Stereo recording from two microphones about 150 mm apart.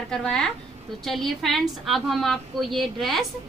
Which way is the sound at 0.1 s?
5° left (ahead or behind).